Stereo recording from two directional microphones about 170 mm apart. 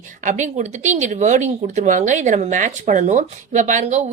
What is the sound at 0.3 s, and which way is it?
Speech, 45° right (ahead or behind).